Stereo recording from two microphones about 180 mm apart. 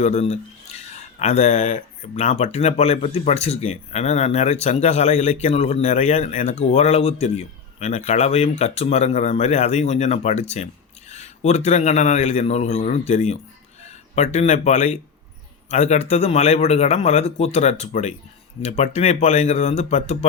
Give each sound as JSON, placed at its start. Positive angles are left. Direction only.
{"t": 0.0, "sound": "speech", "side_deg": 40}